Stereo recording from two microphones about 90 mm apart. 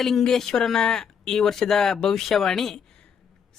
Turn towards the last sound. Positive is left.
turn(degrees=5)  # may be behind; listen again after turning